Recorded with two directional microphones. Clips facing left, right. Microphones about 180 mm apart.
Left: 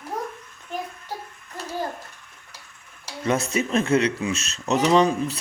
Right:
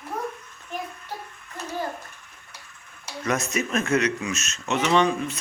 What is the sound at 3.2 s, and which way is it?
Speech, 30° left (ahead or behind).